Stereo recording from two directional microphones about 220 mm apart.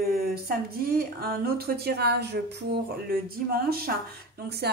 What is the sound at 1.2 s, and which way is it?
Speech, 45° right (ahead or behind).